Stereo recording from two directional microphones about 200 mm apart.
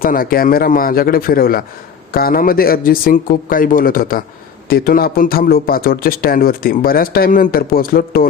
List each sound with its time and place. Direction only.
0.0 s a man's voice: 45° left (ahead or behind)